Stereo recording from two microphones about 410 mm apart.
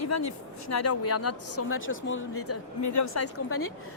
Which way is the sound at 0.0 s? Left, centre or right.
Left.